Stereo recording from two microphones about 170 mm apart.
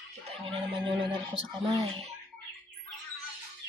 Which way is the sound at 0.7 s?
30° right (ahead or behind).